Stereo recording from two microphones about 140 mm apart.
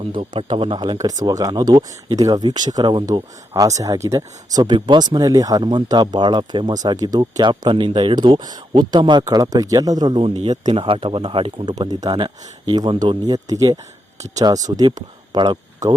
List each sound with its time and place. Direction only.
0.1 s speech: 40° right (ahead or behind)
10.2 s speech: 40° right (ahead or behind)